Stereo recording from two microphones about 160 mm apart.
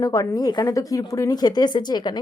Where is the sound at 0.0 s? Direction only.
20° left (ahead or behind).